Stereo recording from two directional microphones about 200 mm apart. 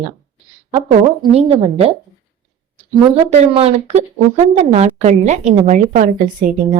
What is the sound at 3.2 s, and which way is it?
A woman's voice, 35° right (ahead or behind).